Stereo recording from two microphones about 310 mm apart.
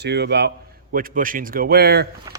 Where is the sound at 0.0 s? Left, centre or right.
Right.